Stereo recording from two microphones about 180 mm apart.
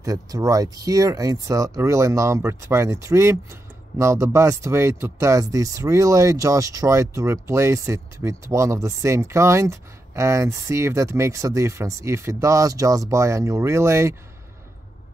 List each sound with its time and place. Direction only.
0.0 s speech: 20° right (ahead or behind)